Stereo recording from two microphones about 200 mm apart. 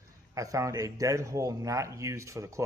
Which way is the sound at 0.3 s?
15° right (ahead or behind).